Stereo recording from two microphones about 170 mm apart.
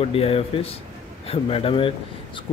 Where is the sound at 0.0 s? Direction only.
35° left (ahead or behind).